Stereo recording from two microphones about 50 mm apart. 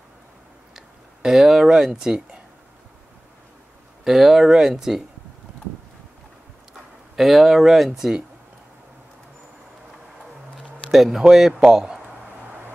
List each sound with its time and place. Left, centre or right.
0.7 s speech: centre
4.0 s speech: centre
7.2 s speech: centre
10.5 s a sound: centre
11.5 s speech: centre